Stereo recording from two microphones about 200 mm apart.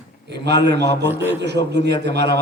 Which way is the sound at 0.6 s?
55° right (ahead or behind).